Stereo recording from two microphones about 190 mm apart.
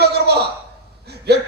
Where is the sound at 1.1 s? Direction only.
60° right (ahead or behind).